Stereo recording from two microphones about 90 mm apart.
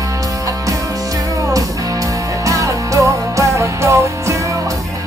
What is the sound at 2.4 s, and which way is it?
Music, 35° right (ahead or behind).